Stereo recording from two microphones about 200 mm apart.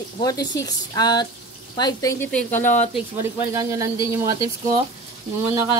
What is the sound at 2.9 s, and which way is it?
Speech, 10° right (ahead or behind).